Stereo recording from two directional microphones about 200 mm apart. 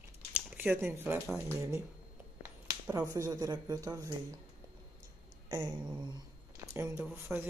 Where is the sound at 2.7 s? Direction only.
20° right (ahead or behind).